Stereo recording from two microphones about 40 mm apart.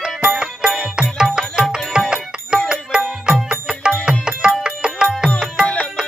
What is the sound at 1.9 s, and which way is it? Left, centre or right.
Music, right.